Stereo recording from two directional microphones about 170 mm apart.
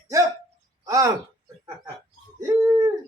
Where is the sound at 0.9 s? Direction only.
20° right (ahead or behind).